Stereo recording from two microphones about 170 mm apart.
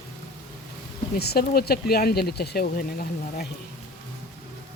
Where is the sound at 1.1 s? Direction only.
70° left (ahead or behind).